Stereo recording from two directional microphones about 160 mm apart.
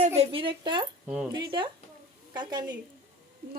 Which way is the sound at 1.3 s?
30° right (ahead or behind).